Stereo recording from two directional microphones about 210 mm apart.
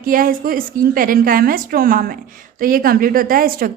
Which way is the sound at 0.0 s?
40° right (ahead or behind).